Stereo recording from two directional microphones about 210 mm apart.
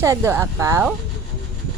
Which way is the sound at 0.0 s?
15° right (ahead or behind).